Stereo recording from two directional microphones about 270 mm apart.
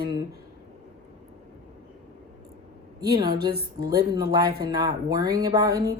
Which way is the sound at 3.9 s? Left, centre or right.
Centre.